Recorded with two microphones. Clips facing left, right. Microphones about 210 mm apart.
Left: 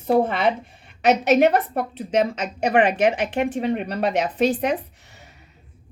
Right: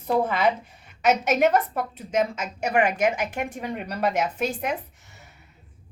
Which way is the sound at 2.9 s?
30° left (ahead or behind).